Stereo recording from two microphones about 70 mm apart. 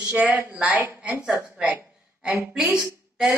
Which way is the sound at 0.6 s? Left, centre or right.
Right.